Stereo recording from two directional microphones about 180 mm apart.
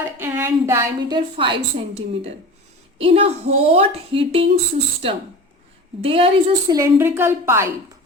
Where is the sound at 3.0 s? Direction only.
35° right (ahead or behind).